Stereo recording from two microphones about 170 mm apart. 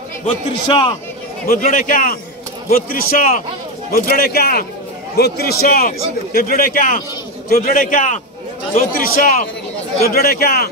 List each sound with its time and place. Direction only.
0.7 s a man's voice: 30° left (ahead or behind)
1.5 s a man's voice: 55° left (ahead or behind)
3.9 s a man's voice: 65° left (ahead or behind)